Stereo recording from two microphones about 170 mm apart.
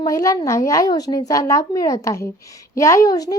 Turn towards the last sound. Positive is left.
turn(degrees=20)  # may be behind; listen again after turning